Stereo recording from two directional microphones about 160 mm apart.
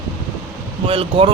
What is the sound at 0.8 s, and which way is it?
Speech, 35° right (ahead or behind).